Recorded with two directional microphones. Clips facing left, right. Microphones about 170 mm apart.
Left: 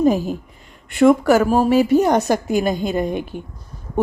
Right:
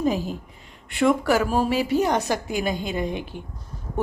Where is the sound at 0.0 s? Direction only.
45° left (ahead or behind).